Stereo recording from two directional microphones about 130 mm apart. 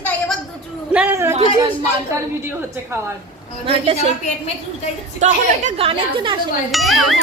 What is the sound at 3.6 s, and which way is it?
Speech, 50° right (ahead or behind).